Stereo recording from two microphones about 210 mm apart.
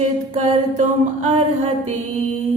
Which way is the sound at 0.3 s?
35° right (ahead or behind).